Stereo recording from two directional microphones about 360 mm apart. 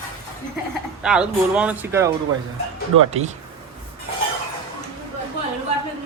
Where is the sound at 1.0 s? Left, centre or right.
Centre.